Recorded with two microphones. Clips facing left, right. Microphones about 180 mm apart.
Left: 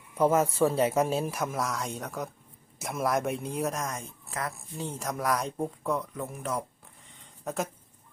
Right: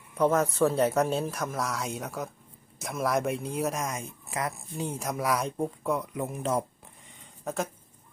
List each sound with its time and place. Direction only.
0.2 s speech: 5° left (ahead or behind)
6.1 s speech: 20° right (ahead or behind)
7.4 s speech: centre (ahead or behind)